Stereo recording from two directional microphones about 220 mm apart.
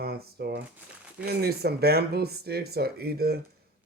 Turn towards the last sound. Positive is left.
turn(degrees=-45)  # may be behind; listen again after turning